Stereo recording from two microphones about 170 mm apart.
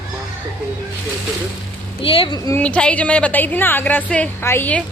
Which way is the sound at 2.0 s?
30° left (ahead or behind).